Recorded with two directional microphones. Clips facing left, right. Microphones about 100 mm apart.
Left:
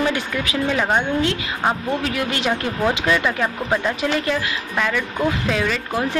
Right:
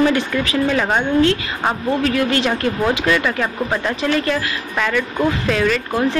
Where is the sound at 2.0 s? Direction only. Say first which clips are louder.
Right 5 dB; 15° left (ahead or behind).